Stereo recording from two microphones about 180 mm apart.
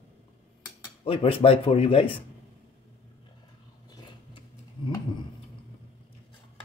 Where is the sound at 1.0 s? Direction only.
30° left (ahead or behind).